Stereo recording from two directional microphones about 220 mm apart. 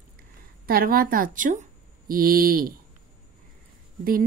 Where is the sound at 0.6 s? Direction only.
40° right (ahead or behind).